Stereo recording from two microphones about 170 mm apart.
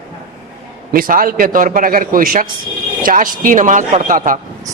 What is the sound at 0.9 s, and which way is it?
A man's voice, 55° right (ahead or behind).